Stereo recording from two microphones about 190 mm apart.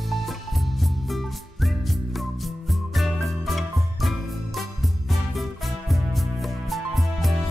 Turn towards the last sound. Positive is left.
turn(degrees=0)  # may be behind; listen again after turning